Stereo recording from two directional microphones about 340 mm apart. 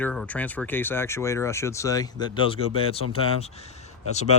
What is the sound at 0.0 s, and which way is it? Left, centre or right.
Speech, centre.